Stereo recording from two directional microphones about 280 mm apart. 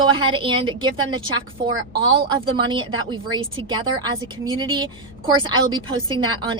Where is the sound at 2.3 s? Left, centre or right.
Centre.